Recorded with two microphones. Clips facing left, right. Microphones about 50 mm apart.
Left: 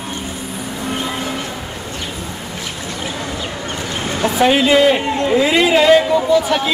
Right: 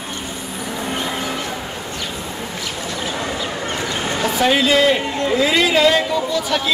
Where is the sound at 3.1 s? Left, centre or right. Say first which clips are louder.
Right 1 dB; right.